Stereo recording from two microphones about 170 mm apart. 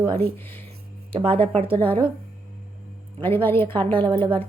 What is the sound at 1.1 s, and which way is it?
Speech, 30° right (ahead or behind).